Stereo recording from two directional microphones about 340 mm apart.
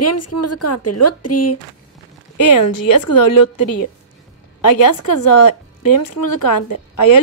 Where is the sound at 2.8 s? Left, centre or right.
Left.